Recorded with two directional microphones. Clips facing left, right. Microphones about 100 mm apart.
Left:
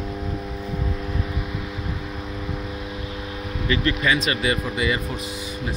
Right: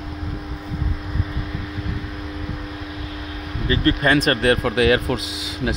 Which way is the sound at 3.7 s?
40° right (ahead or behind).